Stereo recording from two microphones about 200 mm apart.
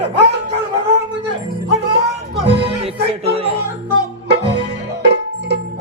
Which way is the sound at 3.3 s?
30° right (ahead or behind).